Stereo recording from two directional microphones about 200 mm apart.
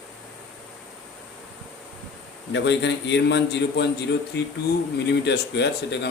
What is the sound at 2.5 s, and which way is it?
Speech, 60° left (ahead or behind).